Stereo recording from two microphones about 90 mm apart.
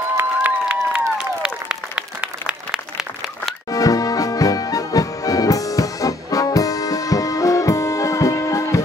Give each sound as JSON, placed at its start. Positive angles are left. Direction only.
{"t": 0.2, "sound": "a sound", "side_deg": -20}
{"t": 1.1, "sound": "applause", "side_deg": -10}
{"t": 3.7, "sound": "music", "side_deg": 40}